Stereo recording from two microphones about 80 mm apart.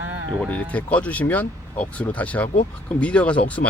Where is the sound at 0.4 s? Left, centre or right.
Centre.